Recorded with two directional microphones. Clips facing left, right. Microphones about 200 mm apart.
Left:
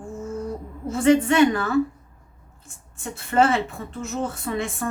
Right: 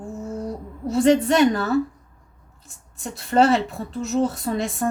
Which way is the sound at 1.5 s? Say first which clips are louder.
Right 2 dB; 35° right (ahead or behind).